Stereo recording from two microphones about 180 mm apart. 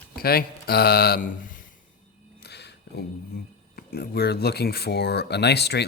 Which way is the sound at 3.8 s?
60° left (ahead or behind).